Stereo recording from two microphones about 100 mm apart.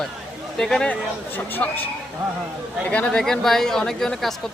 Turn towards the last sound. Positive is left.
turn(degrees=5)  # may be behind; listen again after turning